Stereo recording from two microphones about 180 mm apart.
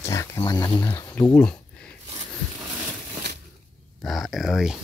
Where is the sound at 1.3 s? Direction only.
5° left (ahead or behind).